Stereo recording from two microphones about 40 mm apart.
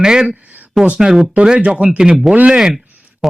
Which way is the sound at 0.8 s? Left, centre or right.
Right.